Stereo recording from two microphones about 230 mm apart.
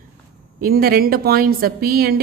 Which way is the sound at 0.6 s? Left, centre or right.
Right.